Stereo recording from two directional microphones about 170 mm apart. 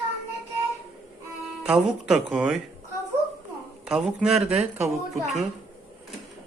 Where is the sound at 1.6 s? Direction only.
5° right (ahead or behind).